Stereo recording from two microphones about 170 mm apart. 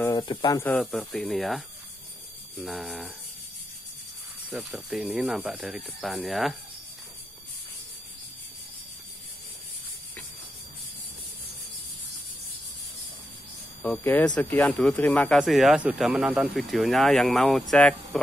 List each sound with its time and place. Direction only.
0.0 s speech: 25° left (ahead or behind)
0.6 s speech: 5° left (ahead or behind)
4.5 s speech: 5° right (ahead or behind)
13.8 s speech: 10° left (ahead or behind)